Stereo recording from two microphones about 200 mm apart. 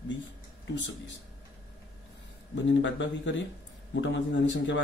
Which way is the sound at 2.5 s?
65° left (ahead or behind).